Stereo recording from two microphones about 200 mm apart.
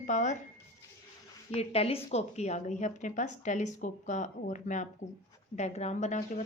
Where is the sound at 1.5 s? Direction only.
30° left (ahead or behind).